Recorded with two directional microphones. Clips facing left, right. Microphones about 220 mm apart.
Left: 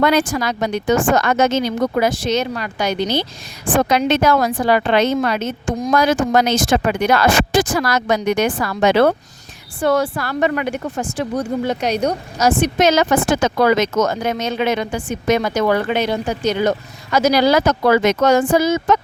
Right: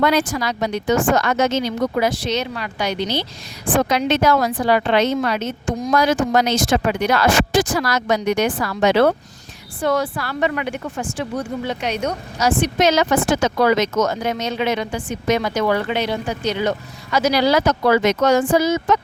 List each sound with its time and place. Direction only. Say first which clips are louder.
0.0 s speech: left 2 dB; 50° left (ahead or behind)